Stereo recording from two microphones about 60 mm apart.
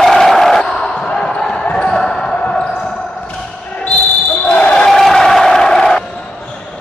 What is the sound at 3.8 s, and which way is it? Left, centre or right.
Basketball bounce, left.